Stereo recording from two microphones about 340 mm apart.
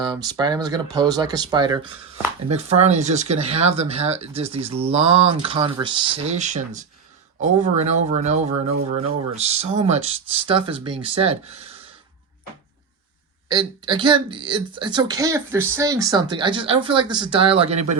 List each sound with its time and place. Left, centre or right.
0.0 s a woman's voice: centre
13.5 s a woman's voice: centre